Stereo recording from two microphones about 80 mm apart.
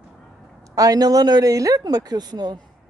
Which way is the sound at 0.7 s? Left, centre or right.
Right.